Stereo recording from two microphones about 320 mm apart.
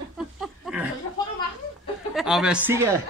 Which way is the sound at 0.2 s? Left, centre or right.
Centre.